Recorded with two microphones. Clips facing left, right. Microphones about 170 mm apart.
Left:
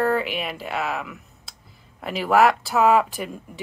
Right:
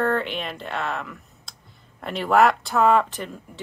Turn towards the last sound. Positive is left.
turn(degrees=10)  # may be behind; listen again after turning